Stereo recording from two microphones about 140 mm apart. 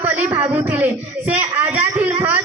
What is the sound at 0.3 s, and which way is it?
Speech, 10° right (ahead or behind).